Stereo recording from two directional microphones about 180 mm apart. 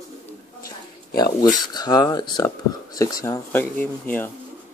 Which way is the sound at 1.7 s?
20° left (ahead or behind).